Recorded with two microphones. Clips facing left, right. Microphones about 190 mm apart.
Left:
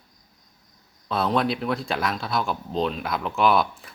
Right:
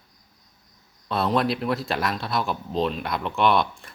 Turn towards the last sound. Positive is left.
turn(degrees=0)  # may be behind; listen again after turning